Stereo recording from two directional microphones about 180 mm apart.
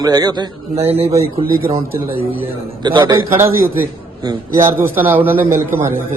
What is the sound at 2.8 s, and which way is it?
Speech, 25° right (ahead or behind).